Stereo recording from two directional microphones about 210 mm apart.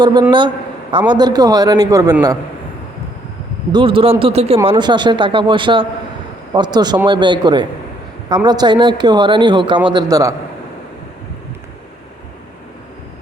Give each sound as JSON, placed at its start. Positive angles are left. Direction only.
{"t": 0.0, "sound": "a man's voice", "side_deg": -20}
{"t": 3.7, "sound": "a man's voice", "side_deg": -25}